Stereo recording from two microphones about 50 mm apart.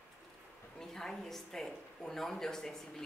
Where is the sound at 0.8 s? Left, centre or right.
Centre.